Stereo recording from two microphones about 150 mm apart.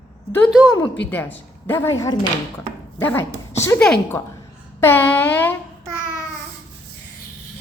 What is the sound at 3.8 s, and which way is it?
A woman's voice, 5° left (ahead or behind).